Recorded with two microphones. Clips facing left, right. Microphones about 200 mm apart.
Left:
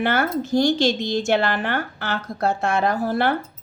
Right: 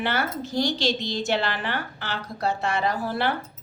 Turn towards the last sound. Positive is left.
turn(degrees=45)  # may be behind; listen again after turning